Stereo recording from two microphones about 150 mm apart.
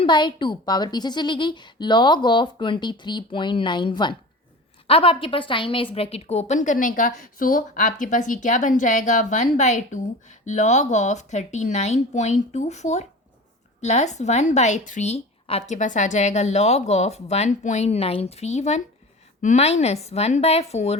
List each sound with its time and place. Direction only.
0.0 s a woman's voice: 30° left (ahead or behind)